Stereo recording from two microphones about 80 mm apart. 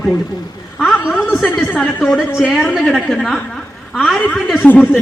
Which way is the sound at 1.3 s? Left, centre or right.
Left.